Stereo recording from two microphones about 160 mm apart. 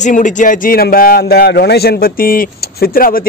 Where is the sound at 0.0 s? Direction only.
50° left (ahead or behind).